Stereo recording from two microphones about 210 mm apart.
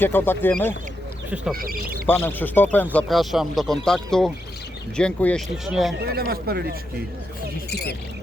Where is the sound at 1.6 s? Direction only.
45° right (ahead or behind).